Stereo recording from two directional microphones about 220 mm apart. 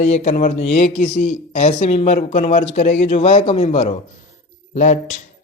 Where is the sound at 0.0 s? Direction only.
30° left (ahead or behind).